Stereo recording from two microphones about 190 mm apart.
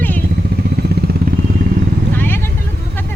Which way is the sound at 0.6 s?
60° right (ahead or behind).